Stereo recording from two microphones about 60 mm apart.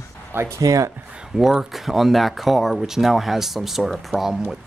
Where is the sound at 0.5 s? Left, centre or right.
Right.